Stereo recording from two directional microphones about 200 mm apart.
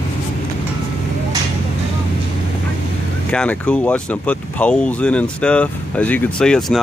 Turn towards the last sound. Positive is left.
turn(degrees=0)  # may be behind; listen again after turning